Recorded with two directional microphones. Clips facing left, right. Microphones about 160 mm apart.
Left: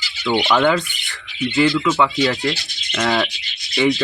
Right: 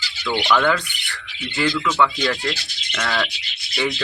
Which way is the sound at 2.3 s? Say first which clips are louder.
Left 3 dB; 25° left (ahead or behind).